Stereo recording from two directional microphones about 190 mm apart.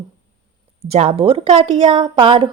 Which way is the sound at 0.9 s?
35° right (ahead or behind).